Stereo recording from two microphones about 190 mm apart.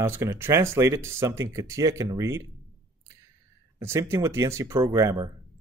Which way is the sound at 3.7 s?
15° right (ahead or behind).